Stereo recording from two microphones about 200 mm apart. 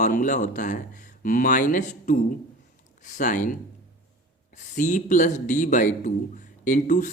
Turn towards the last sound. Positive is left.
turn(degrees=40)  # may be behind; listen again after turning